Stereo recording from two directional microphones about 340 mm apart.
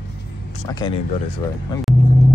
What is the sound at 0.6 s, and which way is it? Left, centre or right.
Speech, centre.